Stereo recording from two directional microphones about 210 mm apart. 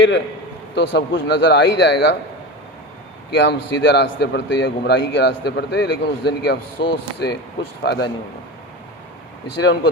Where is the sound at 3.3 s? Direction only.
55° left (ahead or behind).